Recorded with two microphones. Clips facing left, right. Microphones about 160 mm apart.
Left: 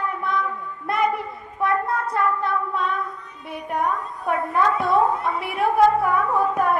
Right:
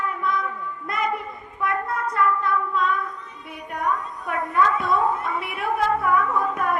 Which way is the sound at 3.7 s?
30° left (ahead or behind).